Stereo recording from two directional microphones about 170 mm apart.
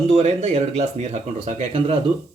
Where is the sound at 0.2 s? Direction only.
40° right (ahead or behind).